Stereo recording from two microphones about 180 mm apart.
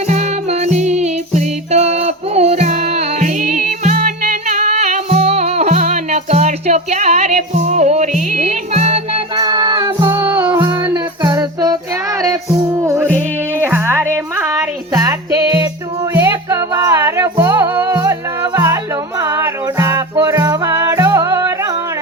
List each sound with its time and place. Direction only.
0.1 s music: 40° right (ahead or behind); by 10.1 s 20° right (ahead or behind)
10.1 s music: 10° right (ahead or behind)